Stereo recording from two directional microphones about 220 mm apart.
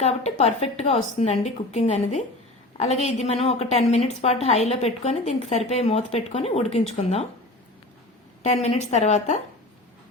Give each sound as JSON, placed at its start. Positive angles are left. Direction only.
{"t": 0.0, "sound": "a woman's voice", "side_deg": 30}
{"t": 8.4, "sound": "a woman's voice", "side_deg": 30}